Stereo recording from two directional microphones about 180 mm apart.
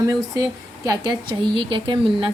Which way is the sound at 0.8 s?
20° right (ahead or behind).